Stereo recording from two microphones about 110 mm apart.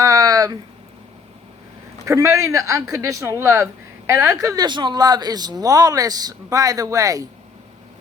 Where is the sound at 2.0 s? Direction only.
25° right (ahead or behind).